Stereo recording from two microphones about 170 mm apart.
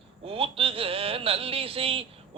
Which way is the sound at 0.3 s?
35° right (ahead or behind).